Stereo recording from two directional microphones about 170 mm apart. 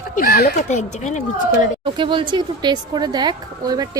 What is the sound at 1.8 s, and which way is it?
Speech, 30° right (ahead or behind).